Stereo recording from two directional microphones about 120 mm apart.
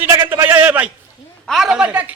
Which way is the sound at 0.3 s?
20° right (ahead or behind).